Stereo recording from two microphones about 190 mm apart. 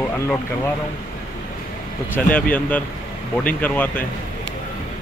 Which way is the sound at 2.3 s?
10° left (ahead or behind).